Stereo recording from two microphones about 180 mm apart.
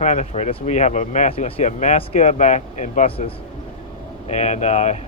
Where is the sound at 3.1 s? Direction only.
30° left (ahead or behind).